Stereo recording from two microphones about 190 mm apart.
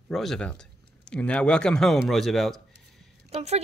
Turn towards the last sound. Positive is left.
turn(degrees=-35)  # may be behind; listen again after turning